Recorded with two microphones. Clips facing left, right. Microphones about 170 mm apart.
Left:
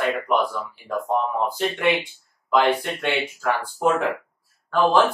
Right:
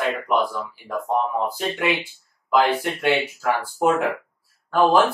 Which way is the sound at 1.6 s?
Centre (ahead or behind).